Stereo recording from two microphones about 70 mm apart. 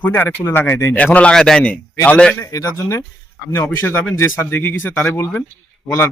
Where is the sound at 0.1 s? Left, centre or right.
Left.